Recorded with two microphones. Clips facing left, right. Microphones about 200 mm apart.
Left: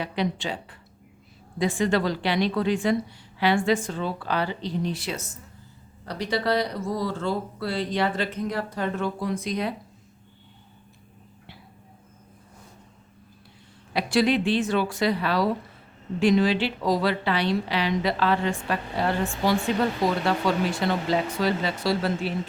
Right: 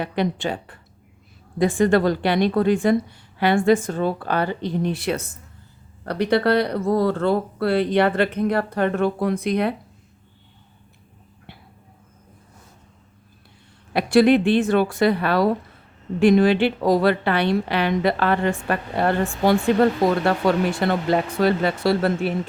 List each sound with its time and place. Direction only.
0.0 s a woman's voice: 55° right (ahead or behind)
13.9 s a woman's voice: 55° right (ahead or behind)